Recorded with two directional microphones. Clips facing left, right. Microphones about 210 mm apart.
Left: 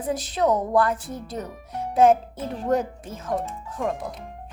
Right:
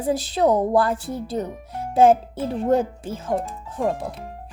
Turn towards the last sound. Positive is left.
turn(degrees=-30)  # may be behind; listen again after turning